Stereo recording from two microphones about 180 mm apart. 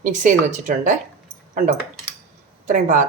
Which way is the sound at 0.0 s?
45° right (ahead or behind).